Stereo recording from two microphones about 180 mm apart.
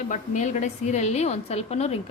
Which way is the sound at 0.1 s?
40° left (ahead or behind).